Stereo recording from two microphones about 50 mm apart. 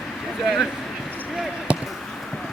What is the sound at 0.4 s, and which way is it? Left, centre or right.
Speech, centre.